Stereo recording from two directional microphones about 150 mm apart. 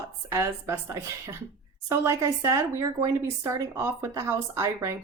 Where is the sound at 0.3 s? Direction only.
15° right (ahead or behind).